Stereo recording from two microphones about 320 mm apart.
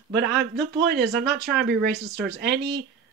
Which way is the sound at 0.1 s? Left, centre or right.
Right.